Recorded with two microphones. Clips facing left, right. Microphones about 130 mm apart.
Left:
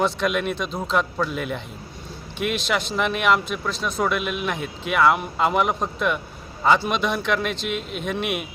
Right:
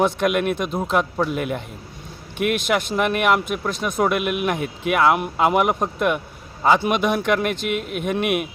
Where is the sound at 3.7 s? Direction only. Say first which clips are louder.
Right 1 dB; 50° right (ahead or behind).